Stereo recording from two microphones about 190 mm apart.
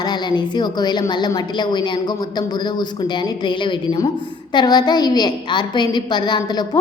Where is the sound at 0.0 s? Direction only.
25° left (ahead or behind).